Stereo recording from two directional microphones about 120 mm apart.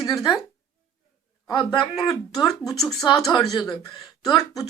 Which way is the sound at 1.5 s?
40° left (ahead or behind).